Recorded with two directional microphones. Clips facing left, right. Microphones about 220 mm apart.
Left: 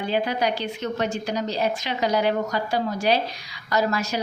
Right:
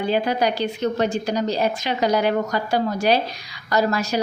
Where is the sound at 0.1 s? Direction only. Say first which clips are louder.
Right 2 dB; 40° right (ahead or behind).